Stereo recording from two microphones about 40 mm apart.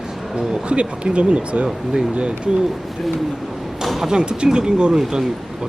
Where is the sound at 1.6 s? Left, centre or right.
Centre.